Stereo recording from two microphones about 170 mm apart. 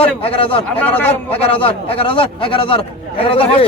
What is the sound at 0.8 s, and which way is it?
Speech, 10° left (ahead or behind).